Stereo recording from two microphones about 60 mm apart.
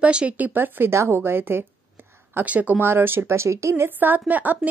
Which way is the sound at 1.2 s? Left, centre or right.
Right.